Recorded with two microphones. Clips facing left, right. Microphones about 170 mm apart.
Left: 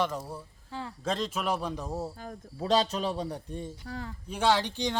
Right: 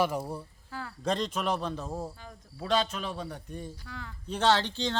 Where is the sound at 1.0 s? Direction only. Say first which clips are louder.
Right 1 dB; centre (ahead or behind).